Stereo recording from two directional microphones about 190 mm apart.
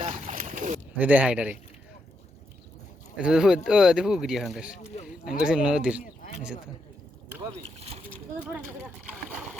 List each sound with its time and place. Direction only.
0.0 s boat: 40° right (ahead or behind)
0.9 s a man's voice: 10° right (ahead or behind)
3.2 s speech: 5° right (ahead or behind)
7.8 s speech: 30° right (ahead or behind)